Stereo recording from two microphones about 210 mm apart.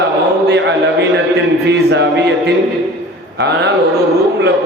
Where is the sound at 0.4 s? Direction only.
55° right (ahead or behind).